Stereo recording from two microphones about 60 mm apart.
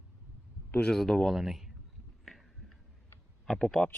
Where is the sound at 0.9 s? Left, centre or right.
Centre.